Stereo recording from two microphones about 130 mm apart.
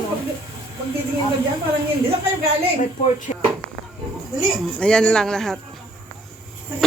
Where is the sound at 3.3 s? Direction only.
65° left (ahead or behind).